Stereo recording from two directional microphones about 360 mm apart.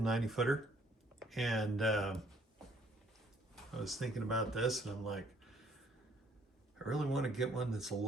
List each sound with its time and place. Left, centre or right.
0.0 s speech: centre
3.5 s speech: centre
6.8 s speech: centre